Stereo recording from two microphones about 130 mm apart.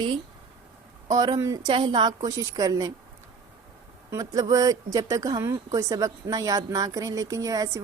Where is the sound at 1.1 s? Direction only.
30° right (ahead or behind).